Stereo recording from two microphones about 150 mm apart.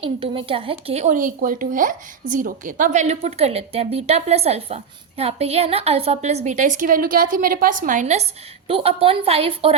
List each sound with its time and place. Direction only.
0.0 s a woman's voice: 35° right (ahead or behind)
1.1 s a woman's voice: 65° right (ahead or behind); by 9.7 s 40° right (ahead or behind)